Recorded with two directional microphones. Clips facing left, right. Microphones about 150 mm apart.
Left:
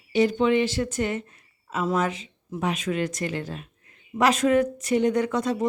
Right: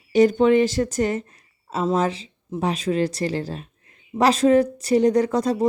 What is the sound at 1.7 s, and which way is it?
Speech, 30° right (ahead or behind).